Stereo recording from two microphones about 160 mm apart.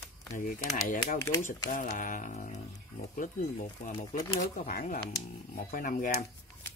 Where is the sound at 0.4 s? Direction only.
55° left (ahead or behind).